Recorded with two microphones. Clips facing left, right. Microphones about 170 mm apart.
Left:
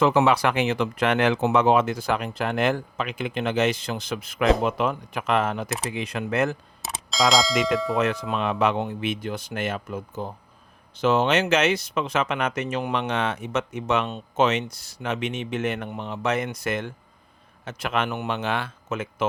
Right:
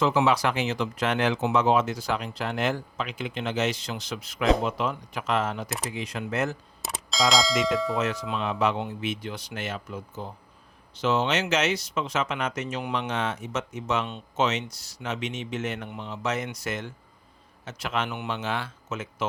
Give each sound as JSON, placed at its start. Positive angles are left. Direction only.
{"t": 0.0, "sound": "speech", "side_deg": 60}
{"t": 6.8, "sound": "speech", "side_deg": 0}
{"t": 7.9, "sound": "speech", "side_deg": 60}